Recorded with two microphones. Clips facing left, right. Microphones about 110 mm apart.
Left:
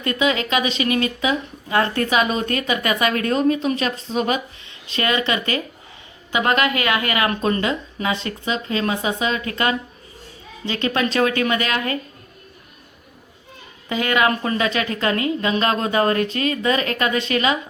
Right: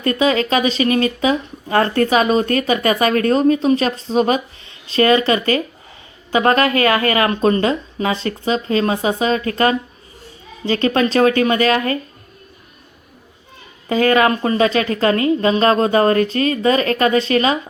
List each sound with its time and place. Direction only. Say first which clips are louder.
0.0 s speech: right 4 dB; 35° right (ahead or behind)
13.8 s speech: right 5 dB; 40° right (ahead or behind)